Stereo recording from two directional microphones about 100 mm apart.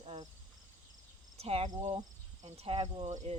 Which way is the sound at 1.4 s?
90° right.